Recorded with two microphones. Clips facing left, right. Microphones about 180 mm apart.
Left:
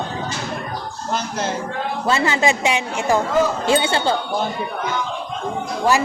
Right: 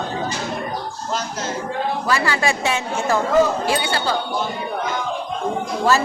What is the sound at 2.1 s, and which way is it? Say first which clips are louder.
Speech: left 4 dB; 25° left (ahead or behind).